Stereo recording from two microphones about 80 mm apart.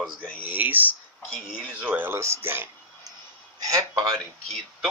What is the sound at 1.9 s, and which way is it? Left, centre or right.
Speech, right.